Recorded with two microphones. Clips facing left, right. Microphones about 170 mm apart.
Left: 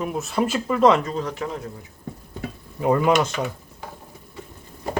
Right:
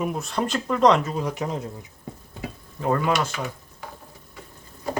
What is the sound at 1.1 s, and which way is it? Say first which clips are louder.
Speech: even; 10° right (ahead or behind).